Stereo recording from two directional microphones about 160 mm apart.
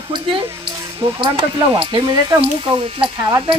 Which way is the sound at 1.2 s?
30° right (ahead or behind).